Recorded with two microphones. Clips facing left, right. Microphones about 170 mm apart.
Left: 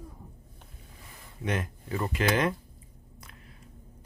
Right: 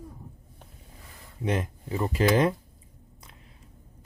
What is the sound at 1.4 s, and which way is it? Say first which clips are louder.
Speech: right 3 dB; 25° right (ahead or behind).